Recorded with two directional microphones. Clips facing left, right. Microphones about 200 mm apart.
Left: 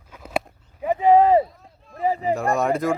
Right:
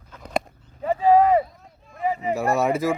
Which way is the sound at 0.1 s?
5° left (ahead or behind).